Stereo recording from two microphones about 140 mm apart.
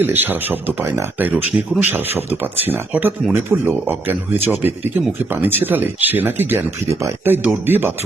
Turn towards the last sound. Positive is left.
turn(degrees=-15)  # may be behind; listen again after turning